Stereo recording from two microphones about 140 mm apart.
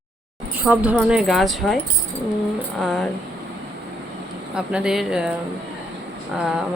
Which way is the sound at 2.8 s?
Centre (ahead or behind).